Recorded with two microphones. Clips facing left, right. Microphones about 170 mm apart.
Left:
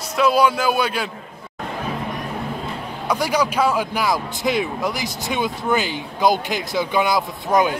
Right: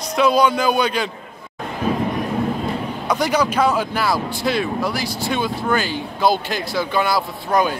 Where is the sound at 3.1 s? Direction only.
10° left (ahead or behind).